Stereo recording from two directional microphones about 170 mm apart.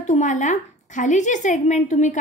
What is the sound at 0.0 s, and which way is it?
A woman's voice, 45° left (ahead or behind).